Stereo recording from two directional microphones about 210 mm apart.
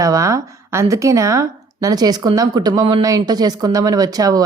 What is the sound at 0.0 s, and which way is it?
Speech, 15° right (ahead or behind).